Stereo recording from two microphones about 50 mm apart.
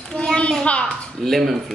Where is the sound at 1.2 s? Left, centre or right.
Centre.